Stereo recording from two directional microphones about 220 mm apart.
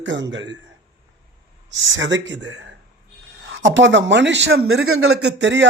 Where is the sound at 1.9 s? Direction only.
55° right (ahead or behind).